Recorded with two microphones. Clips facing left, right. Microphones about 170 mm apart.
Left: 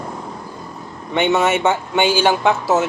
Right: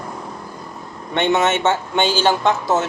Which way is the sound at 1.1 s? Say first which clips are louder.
Left 1 dB; 5° left (ahead or behind).